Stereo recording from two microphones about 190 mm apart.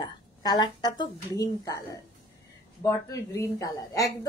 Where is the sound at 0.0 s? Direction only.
20° left (ahead or behind).